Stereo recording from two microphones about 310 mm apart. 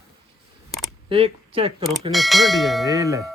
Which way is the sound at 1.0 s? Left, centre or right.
Centre.